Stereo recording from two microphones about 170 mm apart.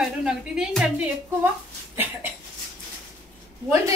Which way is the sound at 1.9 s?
10° right (ahead or behind).